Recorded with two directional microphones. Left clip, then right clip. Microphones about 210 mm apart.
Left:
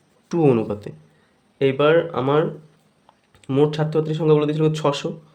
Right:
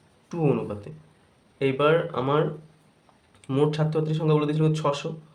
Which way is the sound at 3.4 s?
30° left (ahead or behind).